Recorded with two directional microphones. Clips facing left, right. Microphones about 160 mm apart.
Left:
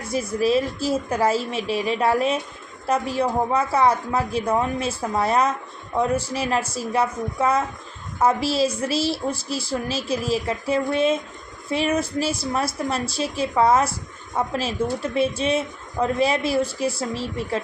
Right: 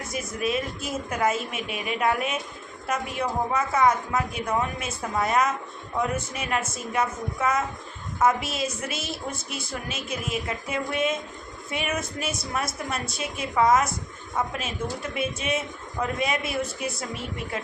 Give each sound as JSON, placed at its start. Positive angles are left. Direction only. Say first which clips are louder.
{"t": 0.1, "sound": "a woman's voice", "louder": "left 8 dB", "side_deg": 30}